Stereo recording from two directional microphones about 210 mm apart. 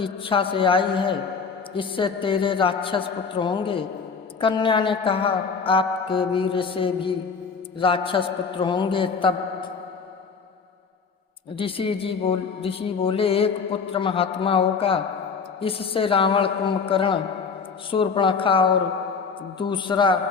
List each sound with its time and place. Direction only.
0.0 s a woman's voice: 25° left (ahead or behind)
11.5 s a woman's voice: 25° left (ahead or behind)